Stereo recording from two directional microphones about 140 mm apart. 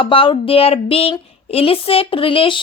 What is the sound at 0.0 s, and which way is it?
Speech, 40° left (ahead or behind).